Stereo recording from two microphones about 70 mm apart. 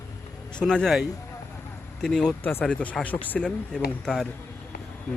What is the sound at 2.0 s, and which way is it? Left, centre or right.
Speech, centre.